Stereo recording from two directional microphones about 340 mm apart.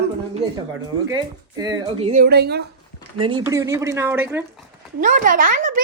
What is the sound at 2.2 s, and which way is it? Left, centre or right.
Speech, right.